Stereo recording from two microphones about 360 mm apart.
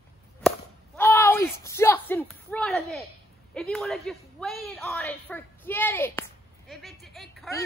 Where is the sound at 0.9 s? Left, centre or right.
Centre.